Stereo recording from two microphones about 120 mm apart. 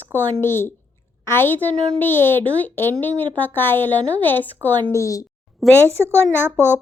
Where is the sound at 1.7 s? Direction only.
60° right (ahead or behind).